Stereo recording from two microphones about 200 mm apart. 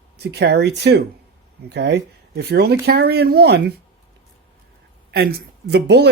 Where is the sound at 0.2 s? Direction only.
55° right (ahead or behind).